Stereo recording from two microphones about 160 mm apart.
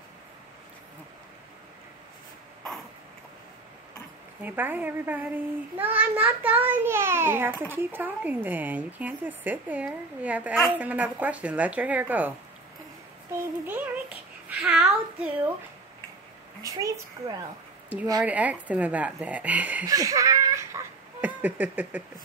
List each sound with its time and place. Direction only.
4.4 s a child's voice: 10° right (ahead or behind)
13.3 s child singing: 10° right (ahead or behind)
16.6 s a child's voice: 20° right (ahead or behind)
18.2 s a child's voice: 10° right (ahead or behind)
19.9 s giggle: 20° right (ahead or behind)